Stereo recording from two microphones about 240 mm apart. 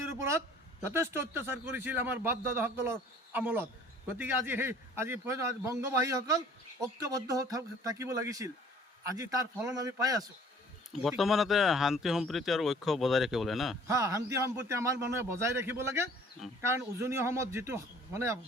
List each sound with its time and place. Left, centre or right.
0.2 s a man's voice: centre
11.2 s speech: centre
13.8 s a man's voice: centre